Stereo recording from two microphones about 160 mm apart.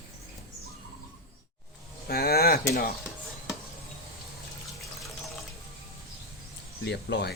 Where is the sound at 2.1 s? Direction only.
75° left (ahead or behind).